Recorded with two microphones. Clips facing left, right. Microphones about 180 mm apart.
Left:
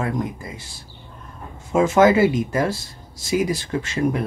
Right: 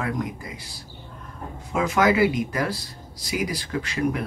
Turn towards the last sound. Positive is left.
turn(degrees=25)  # may be behind; listen again after turning